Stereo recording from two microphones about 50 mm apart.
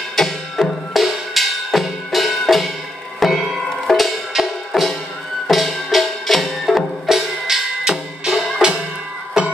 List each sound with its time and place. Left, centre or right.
0.1 s music: centre
0.9 s drum: centre
3.2 s music: centre